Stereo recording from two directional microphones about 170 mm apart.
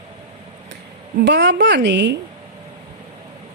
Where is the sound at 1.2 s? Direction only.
85° right.